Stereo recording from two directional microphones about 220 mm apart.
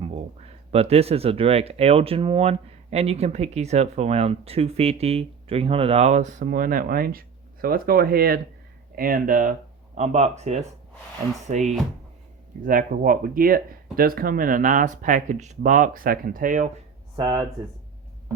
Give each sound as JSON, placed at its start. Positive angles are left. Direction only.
{"t": 0.7, "sound": "speech", "side_deg": -30}
{"t": 17.2, "sound": "speech", "side_deg": -15}